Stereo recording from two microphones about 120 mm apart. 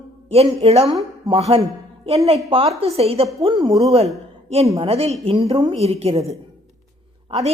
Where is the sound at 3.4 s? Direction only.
45° right (ahead or behind).